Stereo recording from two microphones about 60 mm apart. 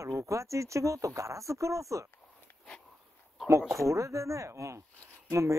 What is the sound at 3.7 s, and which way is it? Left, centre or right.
Speech, right.